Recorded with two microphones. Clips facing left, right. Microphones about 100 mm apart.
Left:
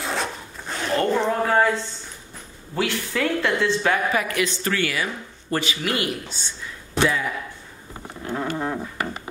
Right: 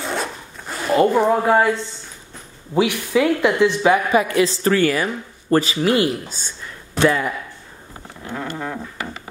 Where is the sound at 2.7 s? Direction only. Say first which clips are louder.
Right 7 dB; 15° right (ahead or behind).